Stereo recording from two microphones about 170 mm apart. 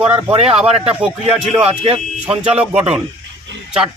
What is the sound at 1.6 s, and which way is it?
Speech, 35° right (ahead or behind).